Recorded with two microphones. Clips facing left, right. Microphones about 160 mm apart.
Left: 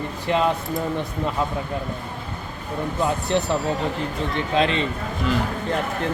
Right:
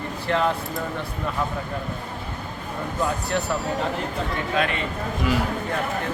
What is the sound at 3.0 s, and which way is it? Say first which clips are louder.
Speech: left 3 dB; 20° left (ahead or behind).